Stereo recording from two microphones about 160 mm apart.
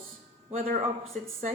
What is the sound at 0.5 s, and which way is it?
Speech, 60° right (ahead or behind).